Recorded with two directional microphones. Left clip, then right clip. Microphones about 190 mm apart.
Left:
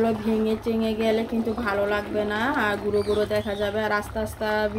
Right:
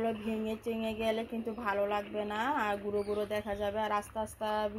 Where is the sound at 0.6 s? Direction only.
20° right (ahead or behind).